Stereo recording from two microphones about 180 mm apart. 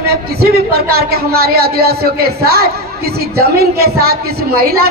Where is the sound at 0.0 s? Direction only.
60° right (ahead or behind).